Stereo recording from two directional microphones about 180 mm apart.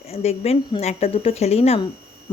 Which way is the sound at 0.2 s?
35° left (ahead or behind).